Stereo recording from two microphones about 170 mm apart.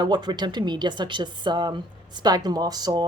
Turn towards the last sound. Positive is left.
turn(degrees=-25)  # may be behind; listen again after turning